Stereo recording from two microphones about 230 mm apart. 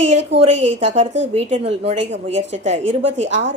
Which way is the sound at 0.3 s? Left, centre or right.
Right.